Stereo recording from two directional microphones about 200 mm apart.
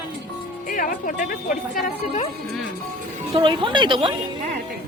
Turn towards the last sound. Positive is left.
turn(degrees=-25)  # may be behind; listen again after turning